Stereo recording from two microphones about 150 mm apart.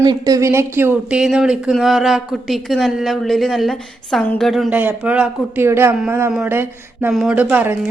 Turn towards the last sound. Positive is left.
turn(degrees=-10)  # may be behind; listen again after turning